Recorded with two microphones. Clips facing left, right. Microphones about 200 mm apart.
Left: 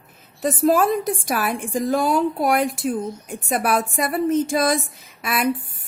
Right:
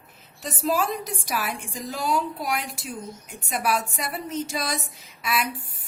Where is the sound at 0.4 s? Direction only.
55° left (ahead or behind).